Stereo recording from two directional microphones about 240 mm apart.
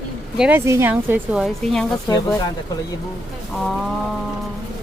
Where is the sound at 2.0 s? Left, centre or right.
Centre.